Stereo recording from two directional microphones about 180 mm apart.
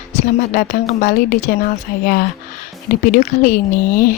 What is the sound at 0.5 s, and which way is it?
Speech, 50° left (ahead or behind).